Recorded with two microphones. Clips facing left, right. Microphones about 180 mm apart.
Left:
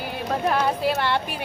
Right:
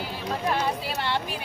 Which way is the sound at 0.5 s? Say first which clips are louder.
Left 5 dB; 55° left (ahead or behind).